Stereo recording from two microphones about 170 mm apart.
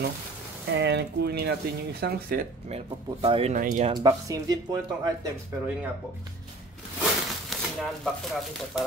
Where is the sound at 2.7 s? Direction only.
35° right (ahead or behind).